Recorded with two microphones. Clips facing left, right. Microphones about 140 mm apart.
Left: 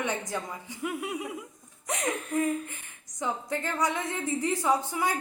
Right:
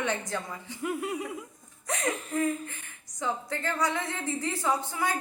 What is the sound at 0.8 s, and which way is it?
Speech, centre (ahead or behind).